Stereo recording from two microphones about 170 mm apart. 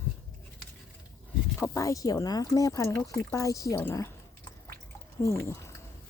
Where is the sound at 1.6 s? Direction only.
20° left (ahead or behind).